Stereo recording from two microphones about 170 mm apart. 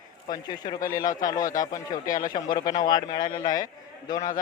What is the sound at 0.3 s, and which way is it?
A man's voice, 25° left (ahead or behind).